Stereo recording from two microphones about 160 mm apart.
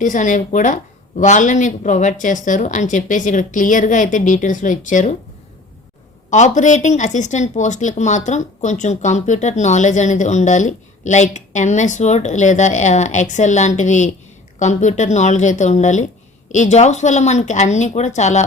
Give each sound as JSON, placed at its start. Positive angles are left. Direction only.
{"t": 0.0, "sound": "speech", "side_deg": 50}
{"t": 6.3, "sound": "speech", "side_deg": 50}